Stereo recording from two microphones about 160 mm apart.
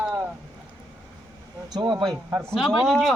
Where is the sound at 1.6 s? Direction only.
25° right (ahead or behind).